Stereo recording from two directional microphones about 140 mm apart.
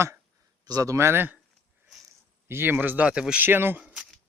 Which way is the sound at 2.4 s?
15° right (ahead or behind).